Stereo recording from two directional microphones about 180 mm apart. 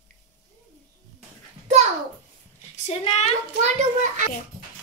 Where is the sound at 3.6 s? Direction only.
40° right (ahead or behind).